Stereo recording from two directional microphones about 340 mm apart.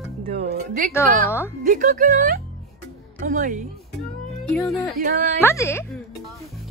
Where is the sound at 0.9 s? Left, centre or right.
Centre.